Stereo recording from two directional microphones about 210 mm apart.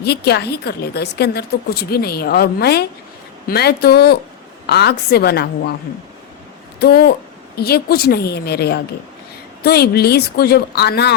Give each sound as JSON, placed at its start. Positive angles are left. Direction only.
{"t": 0.0, "sound": "a woman's voice", "side_deg": 50}
{"t": 6.7, "sound": "a woman's voice", "side_deg": 50}